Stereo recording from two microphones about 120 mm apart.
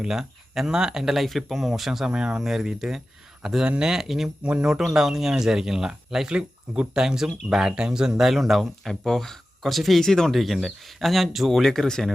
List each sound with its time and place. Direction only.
0.0 s speech: 5° right (ahead or behind)